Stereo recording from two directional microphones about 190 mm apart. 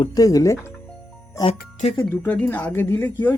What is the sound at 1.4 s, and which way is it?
Speech, 30° left (ahead or behind).